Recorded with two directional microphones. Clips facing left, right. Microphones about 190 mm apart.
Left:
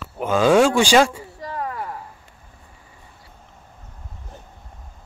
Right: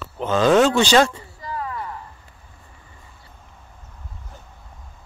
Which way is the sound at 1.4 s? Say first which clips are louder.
Left 1 dB; 55° left (ahead or behind).